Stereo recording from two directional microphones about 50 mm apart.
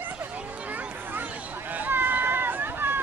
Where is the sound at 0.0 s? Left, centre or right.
Right.